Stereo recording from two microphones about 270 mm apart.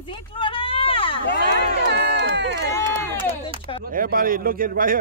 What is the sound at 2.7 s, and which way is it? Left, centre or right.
Run, centre.